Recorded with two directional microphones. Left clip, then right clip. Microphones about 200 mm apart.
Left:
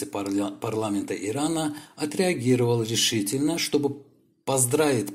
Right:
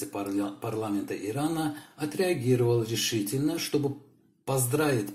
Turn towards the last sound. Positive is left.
turn(degrees=45)  # may be behind; listen again after turning